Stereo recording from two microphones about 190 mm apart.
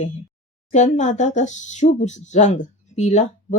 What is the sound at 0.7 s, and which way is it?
Speech, 40° left (ahead or behind).